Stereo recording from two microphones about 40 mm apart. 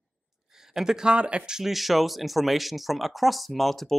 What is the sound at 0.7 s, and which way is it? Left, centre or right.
Speech, centre.